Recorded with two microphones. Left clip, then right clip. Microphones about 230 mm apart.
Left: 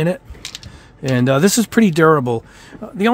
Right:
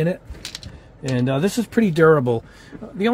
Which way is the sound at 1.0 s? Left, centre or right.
Left.